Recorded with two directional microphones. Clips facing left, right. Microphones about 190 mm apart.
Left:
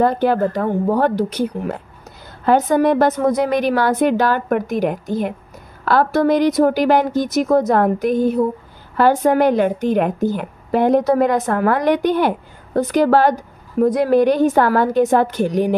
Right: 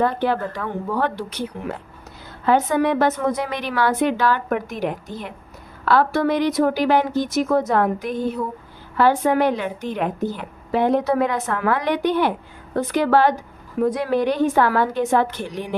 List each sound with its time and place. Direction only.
0.0 s a woman's voice: 40° left (ahead or behind)